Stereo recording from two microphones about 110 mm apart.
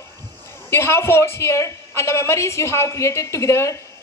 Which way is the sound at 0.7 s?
20° left (ahead or behind).